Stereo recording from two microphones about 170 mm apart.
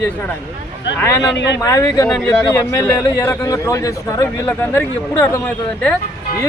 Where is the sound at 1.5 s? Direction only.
20° left (ahead or behind).